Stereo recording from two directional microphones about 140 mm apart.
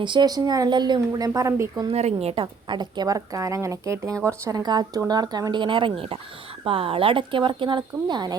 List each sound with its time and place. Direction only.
0.0 s a woman's voice: 35° right (ahead or behind)
1.9 s a woman's voice: 50° right (ahead or behind); by 8.4 s 30° right (ahead or behind)